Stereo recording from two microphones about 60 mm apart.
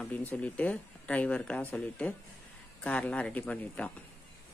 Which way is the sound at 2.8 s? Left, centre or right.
Centre.